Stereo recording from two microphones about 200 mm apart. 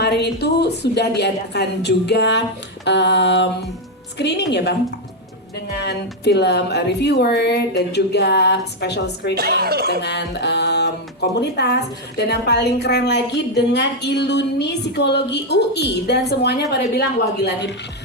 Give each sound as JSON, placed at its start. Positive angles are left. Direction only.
{"t": 0.0, "sound": "speech", "side_deg": 55}
{"t": 9.3, "sound": "speech", "side_deg": -50}
{"t": 10.0, "sound": "speech", "side_deg": 55}